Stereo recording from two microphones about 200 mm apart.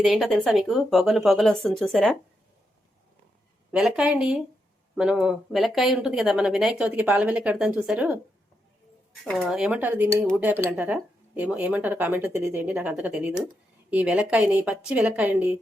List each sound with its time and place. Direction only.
0.0 s speech: centre (ahead or behind)
3.7 s speech: 5° right (ahead or behind)
9.2 s speech: centre (ahead or behind)